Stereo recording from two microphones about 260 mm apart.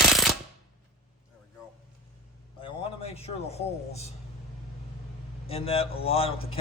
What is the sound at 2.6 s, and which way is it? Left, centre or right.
A man's voice, left.